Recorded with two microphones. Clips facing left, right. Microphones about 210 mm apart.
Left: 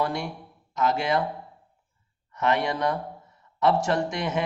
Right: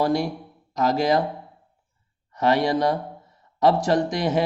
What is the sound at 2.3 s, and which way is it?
A man's voice, 35° right (ahead or behind).